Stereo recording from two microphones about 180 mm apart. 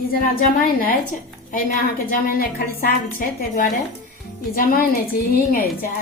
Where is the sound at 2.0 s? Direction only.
50° left (ahead or behind).